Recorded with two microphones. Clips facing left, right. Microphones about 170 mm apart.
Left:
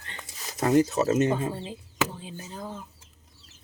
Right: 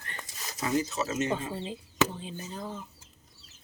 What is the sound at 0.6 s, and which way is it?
Speech, 55° left (ahead or behind).